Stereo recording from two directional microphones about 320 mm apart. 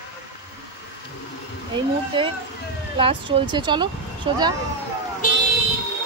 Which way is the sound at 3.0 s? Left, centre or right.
Centre.